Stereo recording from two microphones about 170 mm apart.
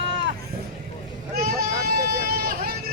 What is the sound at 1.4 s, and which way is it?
Speech, 60° right (ahead or behind).